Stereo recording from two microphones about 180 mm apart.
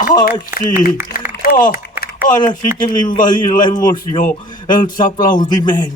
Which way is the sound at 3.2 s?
25° left (ahead or behind).